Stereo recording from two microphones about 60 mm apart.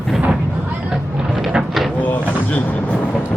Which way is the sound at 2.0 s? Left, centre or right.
Left.